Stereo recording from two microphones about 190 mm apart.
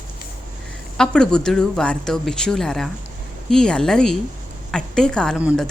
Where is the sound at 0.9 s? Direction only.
5° left (ahead or behind).